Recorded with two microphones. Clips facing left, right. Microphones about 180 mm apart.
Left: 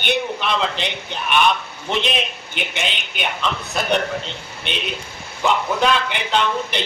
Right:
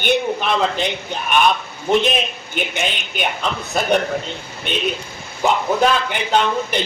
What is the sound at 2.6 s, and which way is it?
Speech, 45° right (ahead or behind).